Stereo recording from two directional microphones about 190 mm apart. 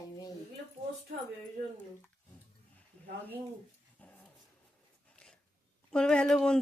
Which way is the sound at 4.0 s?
5° left (ahead or behind).